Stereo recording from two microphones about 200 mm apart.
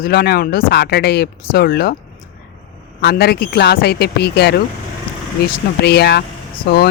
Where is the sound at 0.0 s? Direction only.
50° left (ahead or behind).